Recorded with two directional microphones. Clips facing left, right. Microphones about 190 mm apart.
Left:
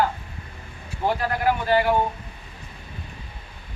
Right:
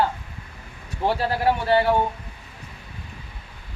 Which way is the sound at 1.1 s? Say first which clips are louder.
Right 2 dB; 30° right (ahead or behind).